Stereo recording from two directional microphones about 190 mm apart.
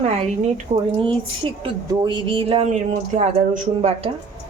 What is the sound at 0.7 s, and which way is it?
Speech, 35° right (ahead or behind).